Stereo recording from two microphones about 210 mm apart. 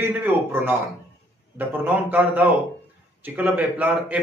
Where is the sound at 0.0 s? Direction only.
10° right (ahead or behind).